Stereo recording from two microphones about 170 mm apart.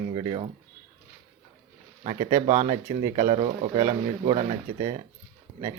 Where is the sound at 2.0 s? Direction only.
35° right (ahead or behind).